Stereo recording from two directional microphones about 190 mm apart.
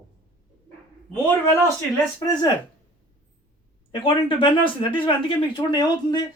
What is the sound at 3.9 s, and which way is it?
Speech, 25° left (ahead or behind).